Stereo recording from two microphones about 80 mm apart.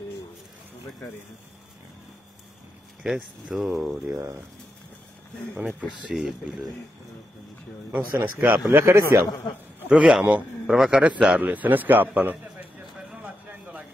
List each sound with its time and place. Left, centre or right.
3.4 s speech: centre
5.9 s speech: centre
7.9 s a man's voice: right
9.8 s a man's voice: centre
13.2 s a sound: centre